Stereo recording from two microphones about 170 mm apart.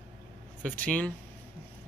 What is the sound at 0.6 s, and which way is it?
Speech, 10° left (ahead or behind).